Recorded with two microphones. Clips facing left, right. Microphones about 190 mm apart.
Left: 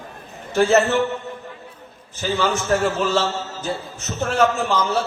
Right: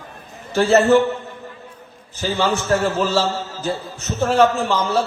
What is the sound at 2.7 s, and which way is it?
A man's voice, 35° right (ahead or behind).